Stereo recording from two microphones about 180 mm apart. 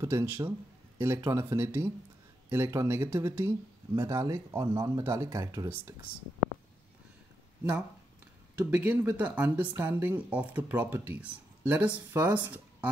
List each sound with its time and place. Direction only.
0.0 s speech: 15° right (ahead or behind)
8.5 s speech: 10° right (ahead or behind)